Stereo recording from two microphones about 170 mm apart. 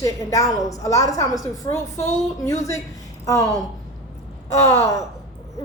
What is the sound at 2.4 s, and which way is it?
A woman's voice, 20° left (ahead or behind).